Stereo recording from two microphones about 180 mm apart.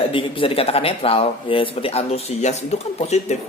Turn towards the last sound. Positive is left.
turn(degrees=40)  # may be behind; listen again after turning